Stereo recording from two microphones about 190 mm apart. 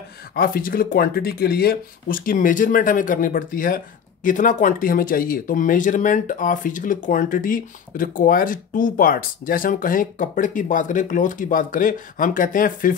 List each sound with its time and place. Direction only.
0.3 s speech: 50° left (ahead or behind)